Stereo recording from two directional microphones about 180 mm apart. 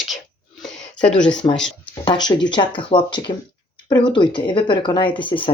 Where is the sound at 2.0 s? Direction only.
25° left (ahead or behind).